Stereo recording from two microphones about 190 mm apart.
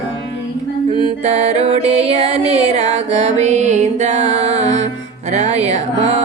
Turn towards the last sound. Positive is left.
turn(degrees=-35)  # may be behind; listen again after turning